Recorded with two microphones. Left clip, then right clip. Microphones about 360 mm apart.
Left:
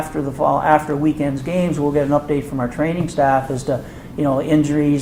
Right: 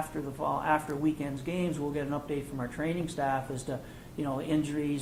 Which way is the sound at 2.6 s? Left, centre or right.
Centre.